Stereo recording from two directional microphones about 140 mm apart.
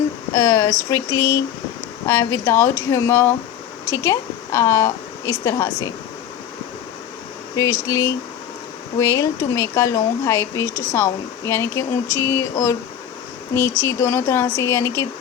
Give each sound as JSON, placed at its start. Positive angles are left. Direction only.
{"t": 0.3, "sound": "speech", "side_deg": 20}
{"t": 7.5, "sound": "speech", "side_deg": 20}